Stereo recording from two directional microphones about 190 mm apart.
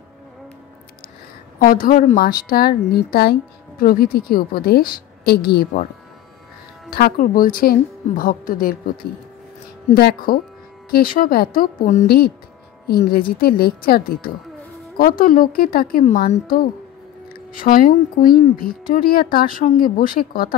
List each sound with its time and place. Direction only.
1.6 s a woman's voice: 45° left (ahead or behind)
6.9 s a woman's voice: 50° left (ahead or behind)
9.9 s a woman's voice: 55° left (ahead or behind)